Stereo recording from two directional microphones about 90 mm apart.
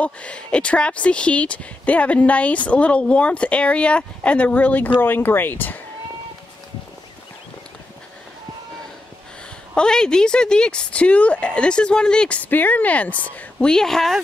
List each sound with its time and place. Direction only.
0.0 s speech: 15° left (ahead or behind)
9.8 s speech: 10° left (ahead or behind)